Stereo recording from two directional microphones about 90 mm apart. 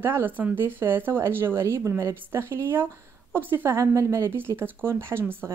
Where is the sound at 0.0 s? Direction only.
25° right (ahead or behind).